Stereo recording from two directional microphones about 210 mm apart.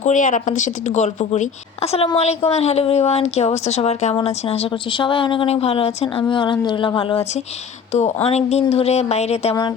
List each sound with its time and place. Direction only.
0.0 s a woman's voice: 35° left (ahead or behind)